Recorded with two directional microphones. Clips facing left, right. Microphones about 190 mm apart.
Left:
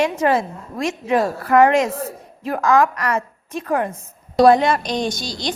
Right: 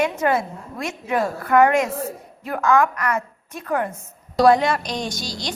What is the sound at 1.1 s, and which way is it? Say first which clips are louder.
A woman's voice: left 2 dB; 25° left (ahead or behind).